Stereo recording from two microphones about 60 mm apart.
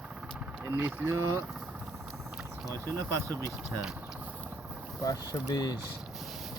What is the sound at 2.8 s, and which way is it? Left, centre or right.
Speech, right.